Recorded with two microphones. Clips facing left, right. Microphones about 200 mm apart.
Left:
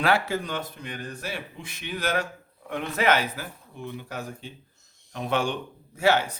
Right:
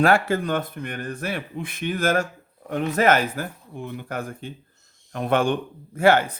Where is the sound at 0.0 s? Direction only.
50° right (ahead or behind).